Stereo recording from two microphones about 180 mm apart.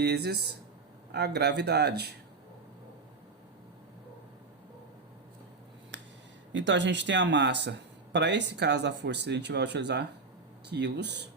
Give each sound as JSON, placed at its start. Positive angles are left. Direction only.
{"t": 0.0, "sound": "speech", "side_deg": -65}
{"t": 6.5, "sound": "speech", "side_deg": -90}